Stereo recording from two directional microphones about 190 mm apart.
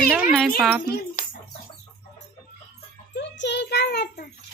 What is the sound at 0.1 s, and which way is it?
Speech, centre (ahead or behind).